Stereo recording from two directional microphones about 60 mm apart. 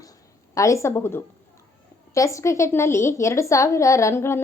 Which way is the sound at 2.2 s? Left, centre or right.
Left.